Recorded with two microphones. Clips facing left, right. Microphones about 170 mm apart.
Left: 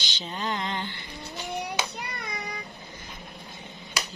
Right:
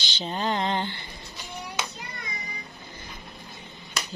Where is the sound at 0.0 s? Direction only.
30° right (ahead or behind).